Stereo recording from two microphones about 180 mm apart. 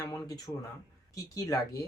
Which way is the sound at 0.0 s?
20° left (ahead or behind).